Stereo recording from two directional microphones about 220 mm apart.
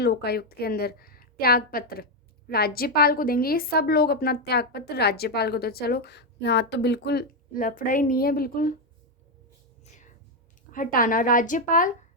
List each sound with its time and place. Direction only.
0.0 s a woman's voice: 45° left (ahead or behind)
9.8 s a sound: 35° left (ahead or behind)
10.7 s speech: 40° left (ahead or behind)